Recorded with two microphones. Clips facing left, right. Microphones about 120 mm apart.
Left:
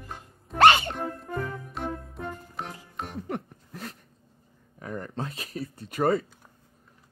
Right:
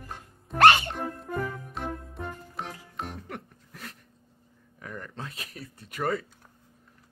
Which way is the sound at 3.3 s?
30° left (ahead or behind).